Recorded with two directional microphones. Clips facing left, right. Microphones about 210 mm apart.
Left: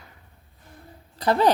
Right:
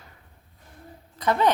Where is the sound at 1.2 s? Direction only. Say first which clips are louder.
Left 2 dB; 35° left (ahead or behind).